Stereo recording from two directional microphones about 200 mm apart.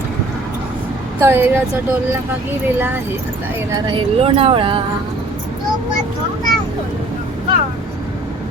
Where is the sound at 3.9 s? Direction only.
25° right (ahead or behind).